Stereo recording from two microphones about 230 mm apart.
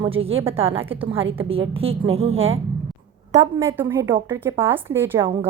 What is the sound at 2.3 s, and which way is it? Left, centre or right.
Speech, right.